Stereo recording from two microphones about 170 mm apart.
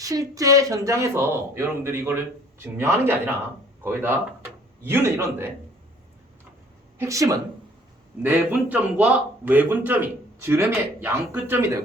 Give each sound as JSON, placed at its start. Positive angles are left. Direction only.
{"t": 0.0, "sound": "speech", "side_deg": -20}
{"t": 7.0, "sound": "speech", "side_deg": -20}